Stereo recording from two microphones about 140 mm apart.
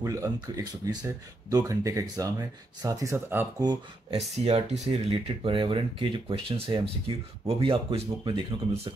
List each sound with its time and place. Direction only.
0.0 s speech: 25° right (ahead or behind)
4.5 s speech: 45° right (ahead or behind)